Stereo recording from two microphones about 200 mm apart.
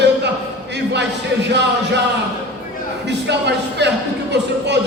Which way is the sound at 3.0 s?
60° right (ahead or behind).